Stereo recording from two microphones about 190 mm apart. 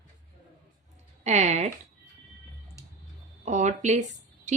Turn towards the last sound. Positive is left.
turn(degrees=-40)  # may be behind; listen again after turning